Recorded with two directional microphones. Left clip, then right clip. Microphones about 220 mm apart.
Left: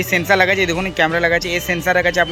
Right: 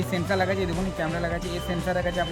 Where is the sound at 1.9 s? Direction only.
35° left (ahead or behind).